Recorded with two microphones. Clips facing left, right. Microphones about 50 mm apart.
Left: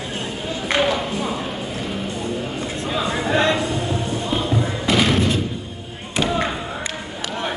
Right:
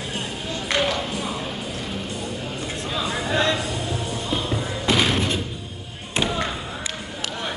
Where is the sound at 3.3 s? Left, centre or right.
Left.